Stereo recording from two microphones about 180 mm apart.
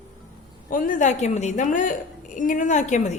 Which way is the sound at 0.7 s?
45° left (ahead or behind).